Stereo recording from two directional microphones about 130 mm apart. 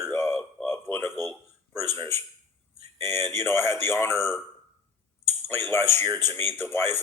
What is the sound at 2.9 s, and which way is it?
Speech, 20° left (ahead or behind).